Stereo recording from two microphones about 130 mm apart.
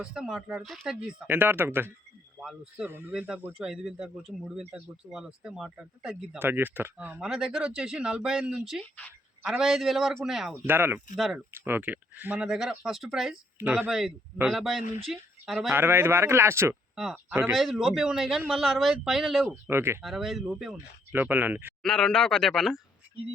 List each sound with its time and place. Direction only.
0.0 s speech: 5° right (ahead or behind)
1.0 s speech: 15° right (ahead or behind)
2.4 s speech: 5° right (ahead or behind)
10.7 s speech: 15° right (ahead or behind)
11.2 s speech: 5° right (ahead or behind)
11.5 s speech: 15° right (ahead or behind); by 15.7 s centre (ahead or behind)
15.7 s a man's voice: 15° right (ahead or behind)
16.9 s speech: 5° right (ahead or behind)
19.6 s a man's voice: 20° right (ahead or behind)
20.0 s speech: centre (ahead or behind)
21.8 s speech: 5° left (ahead or behind)